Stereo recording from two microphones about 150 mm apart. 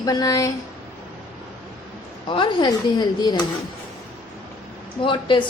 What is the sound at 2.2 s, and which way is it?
A woman's voice, 30° left (ahead or behind).